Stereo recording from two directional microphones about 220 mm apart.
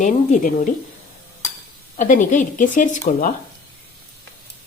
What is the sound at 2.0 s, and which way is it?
A woman's voice, 35° left (ahead or behind).